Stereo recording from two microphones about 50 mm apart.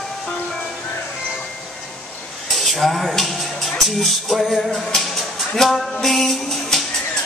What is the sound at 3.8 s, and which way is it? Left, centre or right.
Music, centre.